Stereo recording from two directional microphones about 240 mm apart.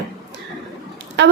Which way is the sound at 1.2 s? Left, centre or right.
Right.